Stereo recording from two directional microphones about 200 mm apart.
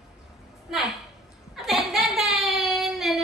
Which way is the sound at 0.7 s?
Centre (ahead or behind).